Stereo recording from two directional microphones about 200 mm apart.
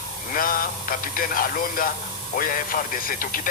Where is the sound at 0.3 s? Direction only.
45° left (ahead or behind).